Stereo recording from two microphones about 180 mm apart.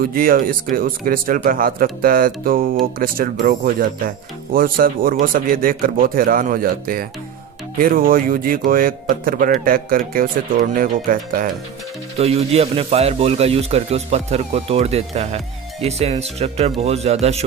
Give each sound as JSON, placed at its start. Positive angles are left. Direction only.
{"t": 0.0, "sound": "speech", "side_deg": -50}
{"t": 12.2, "sound": "speech", "side_deg": -35}